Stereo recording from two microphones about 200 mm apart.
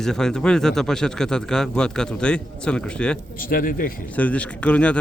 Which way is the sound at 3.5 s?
45° left (ahead or behind).